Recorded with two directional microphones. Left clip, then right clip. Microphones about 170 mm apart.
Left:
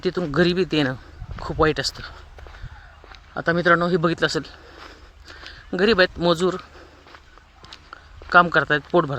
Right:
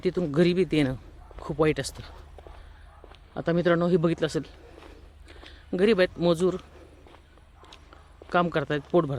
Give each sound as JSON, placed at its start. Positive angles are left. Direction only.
{"t": 0.0, "sound": "speech", "side_deg": -10}
{"t": 3.3, "sound": "speech", "side_deg": -15}
{"t": 4.0, "sound": "speech", "side_deg": -5}
{"t": 7.6, "sound": "a sound", "side_deg": -5}